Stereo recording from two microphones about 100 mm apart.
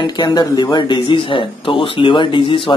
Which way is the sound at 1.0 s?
60° left (ahead or behind).